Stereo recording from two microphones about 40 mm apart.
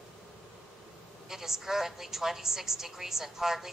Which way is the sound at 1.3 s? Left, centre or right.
Centre.